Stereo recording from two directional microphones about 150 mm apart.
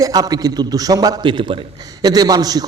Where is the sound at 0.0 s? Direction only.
25° right (ahead or behind).